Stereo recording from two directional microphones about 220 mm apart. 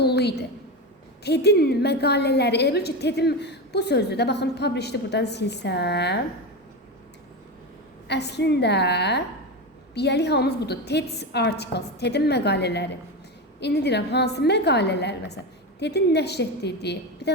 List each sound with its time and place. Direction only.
0.0 s a woman's voice: 50° left (ahead or behind)
8.0 s a woman's voice: 50° left (ahead or behind)